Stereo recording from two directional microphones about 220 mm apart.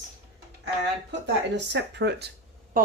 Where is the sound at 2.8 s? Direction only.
40° right (ahead or behind).